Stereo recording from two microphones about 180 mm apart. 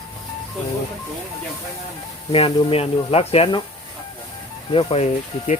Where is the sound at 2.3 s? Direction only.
30° left (ahead or behind).